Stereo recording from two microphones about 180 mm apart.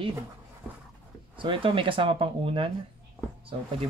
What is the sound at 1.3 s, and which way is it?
Speech, 30° right (ahead or behind).